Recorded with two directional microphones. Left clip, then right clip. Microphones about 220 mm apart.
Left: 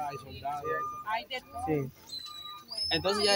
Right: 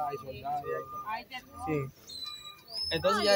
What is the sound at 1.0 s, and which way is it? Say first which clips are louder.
Speech: left 4 dB; 15° left (ahead or behind).